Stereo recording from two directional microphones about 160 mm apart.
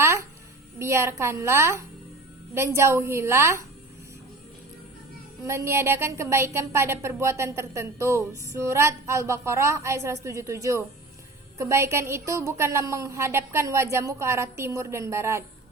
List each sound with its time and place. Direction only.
0.0 s a sound: 15° right (ahead or behind)
0.8 s a woman's voice: 15° right (ahead or behind)
5.4 s a woman's voice: 15° right (ahead or behind)